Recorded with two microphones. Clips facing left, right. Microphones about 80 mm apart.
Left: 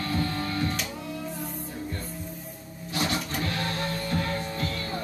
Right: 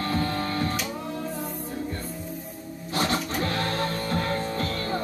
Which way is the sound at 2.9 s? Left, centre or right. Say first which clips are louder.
Right 3 dB; right.